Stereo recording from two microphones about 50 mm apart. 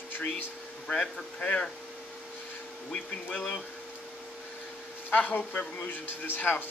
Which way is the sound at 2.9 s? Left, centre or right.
Left.